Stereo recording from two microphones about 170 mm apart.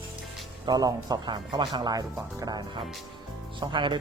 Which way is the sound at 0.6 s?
20° right (ahead or behind).